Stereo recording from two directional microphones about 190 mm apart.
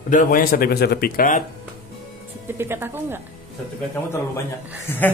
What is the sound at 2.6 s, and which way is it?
Speech, 10° right (ahead or behind).